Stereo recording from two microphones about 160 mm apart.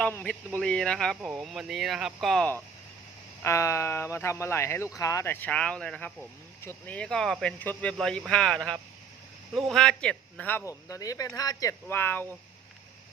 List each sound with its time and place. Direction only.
0.0 s speech: 10° left (ahead or behind)
3.4 s speech: 20° left (ahead or behind)
11.9 s speech: 10° left (ahead or behind)